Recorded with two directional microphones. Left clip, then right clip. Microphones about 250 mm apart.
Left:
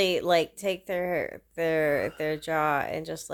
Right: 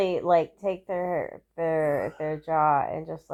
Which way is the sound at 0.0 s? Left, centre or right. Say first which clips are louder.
Right 1 dB; left.